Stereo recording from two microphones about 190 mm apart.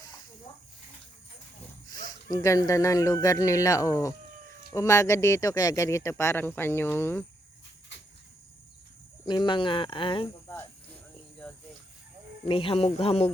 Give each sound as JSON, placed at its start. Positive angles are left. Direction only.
{"t": 2.3, "sound": "speech", "side_deg": 15}
{"t": 9.2, "sound": "speech", "side_deg": 20}
{"t": 12.5, "sound": "speech", "side_deg": 30}